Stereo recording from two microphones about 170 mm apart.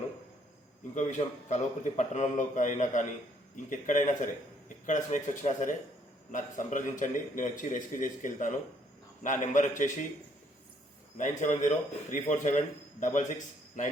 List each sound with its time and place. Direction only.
0.9 s a man's voice: 45° left (ahead or behind)
11.2 s a man's voice: 45° left (ahead or behind)